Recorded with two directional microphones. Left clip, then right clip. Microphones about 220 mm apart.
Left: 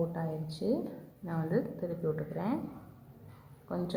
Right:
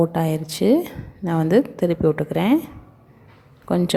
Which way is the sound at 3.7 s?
40° right (ahead or behind).